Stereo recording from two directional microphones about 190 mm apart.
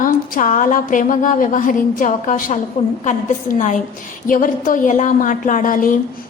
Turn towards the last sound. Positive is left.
turn(degrees=45)  # may be behind; listen again after turning